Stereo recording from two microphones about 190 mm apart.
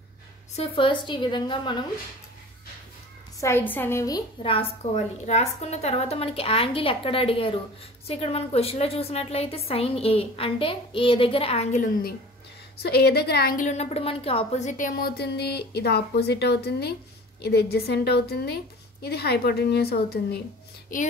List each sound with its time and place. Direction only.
0.6 s a woman's voice: 25° left (ahead or behind)
3.3 s a woman's voice: 15° left (ahead or behind)
4.4 s a woman's voice: 30° left (ahead or behind); by 12.2 s 45° left (ahead or behind)
12.7 s a woman's voice: 55° left (ahead or behind)